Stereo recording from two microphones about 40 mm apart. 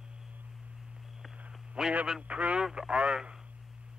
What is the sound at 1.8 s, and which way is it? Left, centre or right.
Speech, right.